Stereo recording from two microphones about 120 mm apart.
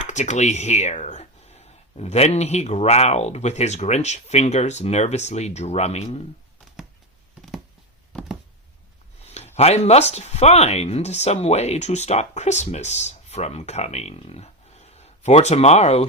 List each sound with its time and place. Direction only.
0.0 s speech: 75° left (ahead or behind)
9.3 s speech: 65° left (ahead or behind)